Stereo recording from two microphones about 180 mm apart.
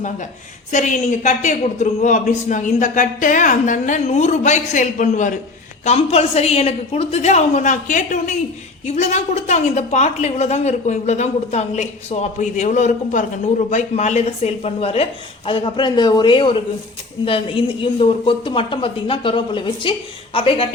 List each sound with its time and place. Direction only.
0.7 s a man's voice: 45° left (ahead or behind)